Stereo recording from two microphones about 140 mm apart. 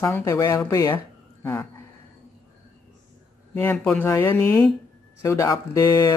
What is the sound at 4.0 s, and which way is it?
Speech, 20° left (ahead or behind).